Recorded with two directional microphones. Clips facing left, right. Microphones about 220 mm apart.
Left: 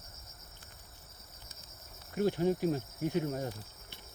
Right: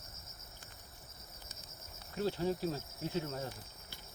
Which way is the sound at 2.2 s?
15° left (ahead or behind).